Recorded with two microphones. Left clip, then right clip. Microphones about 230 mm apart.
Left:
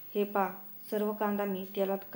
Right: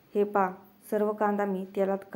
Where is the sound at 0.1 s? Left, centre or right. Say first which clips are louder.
Right 5 dB; right.